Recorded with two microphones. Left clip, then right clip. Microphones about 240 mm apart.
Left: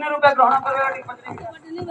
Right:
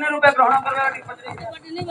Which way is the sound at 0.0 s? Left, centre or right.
Centre.